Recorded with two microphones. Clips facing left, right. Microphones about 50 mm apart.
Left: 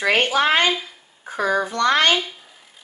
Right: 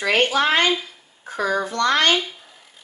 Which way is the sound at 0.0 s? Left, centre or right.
Centre.